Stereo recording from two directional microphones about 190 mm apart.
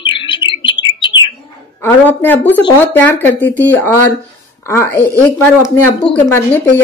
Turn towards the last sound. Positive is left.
turn(degrees=10)  # may be behind; listen again after turning